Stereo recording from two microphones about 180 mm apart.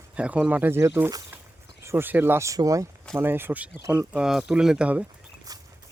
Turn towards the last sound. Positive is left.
turn(degrees=-20)  # may be behind; listen again after turning